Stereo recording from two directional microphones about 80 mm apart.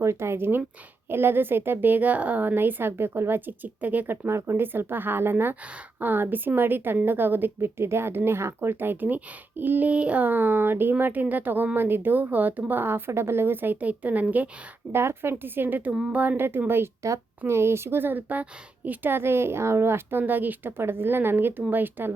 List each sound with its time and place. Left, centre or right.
0.0 s a woman's voice: right
15.9 s a woman's voice: centre